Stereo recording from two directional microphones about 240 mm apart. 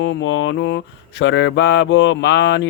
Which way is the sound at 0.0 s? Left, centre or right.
Left.